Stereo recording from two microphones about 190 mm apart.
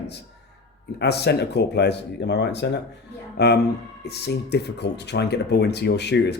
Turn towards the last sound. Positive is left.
turn(degrees=65)  # may be behind; listen again after turning